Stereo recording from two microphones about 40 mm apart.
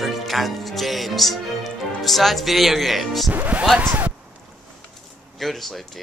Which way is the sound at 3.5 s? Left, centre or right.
Right.